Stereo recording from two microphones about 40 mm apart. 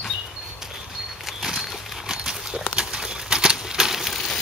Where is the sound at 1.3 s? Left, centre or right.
Centre.